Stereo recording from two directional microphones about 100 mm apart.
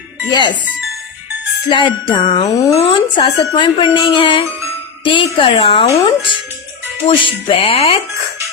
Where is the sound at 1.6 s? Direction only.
55° left (ahead or behind); by 5.9 s 75° left (ahead or behind).